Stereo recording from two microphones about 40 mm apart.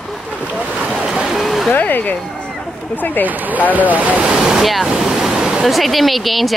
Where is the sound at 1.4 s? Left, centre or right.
Centre.